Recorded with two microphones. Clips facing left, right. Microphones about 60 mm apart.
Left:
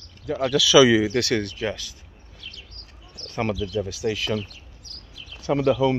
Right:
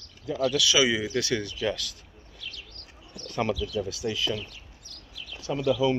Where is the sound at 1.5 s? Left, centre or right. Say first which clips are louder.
Left 1 dB; left.